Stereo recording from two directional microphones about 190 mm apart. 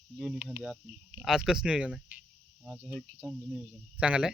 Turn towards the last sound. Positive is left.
turn(degrees=-5)  # may be behind; listen again after turning